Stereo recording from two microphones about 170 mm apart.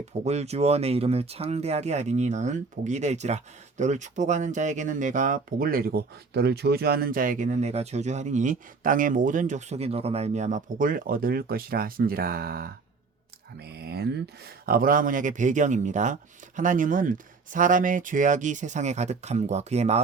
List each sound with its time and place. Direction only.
0.3 s speech: 40° right (ahead or behind)